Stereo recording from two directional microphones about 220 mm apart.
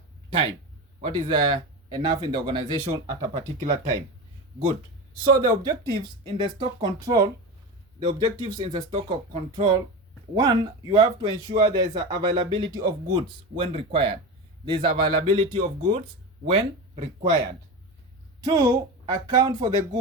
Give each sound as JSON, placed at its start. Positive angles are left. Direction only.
{"t": 1.0, "sound": "speech", "side_deg": -20}
{"t": 5.5, "sound": "speech", "side_deg": -20}
{"t": 18.4, "sound": "speech", "side_deg": -20}